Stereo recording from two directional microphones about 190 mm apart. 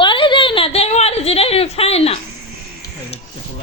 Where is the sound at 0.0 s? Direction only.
25° left (ahead or behind).